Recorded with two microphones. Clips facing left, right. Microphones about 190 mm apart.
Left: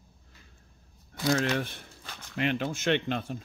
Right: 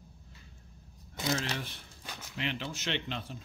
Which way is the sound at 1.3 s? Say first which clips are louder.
Left 8 dB; 55° left (ahead or behind).